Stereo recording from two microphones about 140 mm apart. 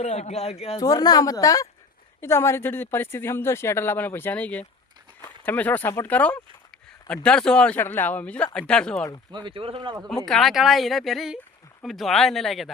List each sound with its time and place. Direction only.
0.0 s speech: 50° left (ahead or behind)
0.8 s a woman's voice: 25° left (ahead or behind); by 9.0 s 5° left (ahead or behind)
9.3 s speech: 35° right (ahead or behind)
10.2 s speech: centre (ahead or behind)